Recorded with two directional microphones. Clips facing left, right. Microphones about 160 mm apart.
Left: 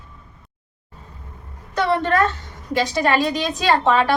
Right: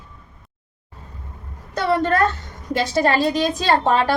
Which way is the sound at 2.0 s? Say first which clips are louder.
Right 1 dB; 35° right (ahead or behind).